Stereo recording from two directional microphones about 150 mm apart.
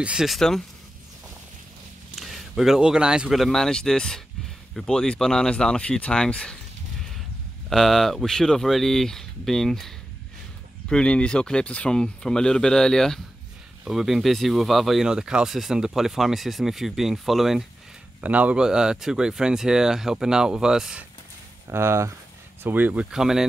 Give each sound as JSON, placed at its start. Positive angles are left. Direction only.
{"t": 0.0, "sound": "speech", "side_deg": -5}
{"t": 2.1, "sound": "speech", "side_deg": 0}
{"t": 7.7, "sound": "speech", "side_deg": 0}
{"t": 21.6, "sound": "speech", "side_deg": -15}